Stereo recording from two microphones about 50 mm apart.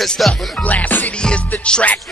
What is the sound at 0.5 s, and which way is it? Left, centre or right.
Music, left.